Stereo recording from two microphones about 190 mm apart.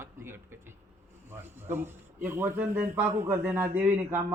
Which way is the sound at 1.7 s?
10° right (ahead or behind).